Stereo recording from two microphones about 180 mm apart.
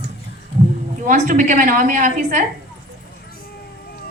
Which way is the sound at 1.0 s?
45° right (ahead or behind).